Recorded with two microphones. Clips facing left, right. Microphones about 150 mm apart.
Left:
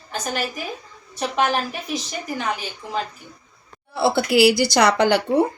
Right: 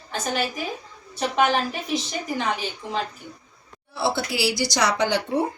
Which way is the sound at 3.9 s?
60° left (ahead or behind).